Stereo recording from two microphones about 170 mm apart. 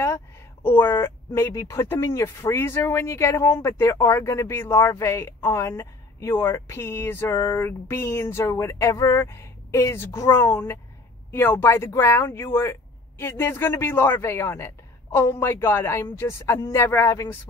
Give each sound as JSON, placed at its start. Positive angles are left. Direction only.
{"t": 0.7, "sound": "speech", "side_deg": 15}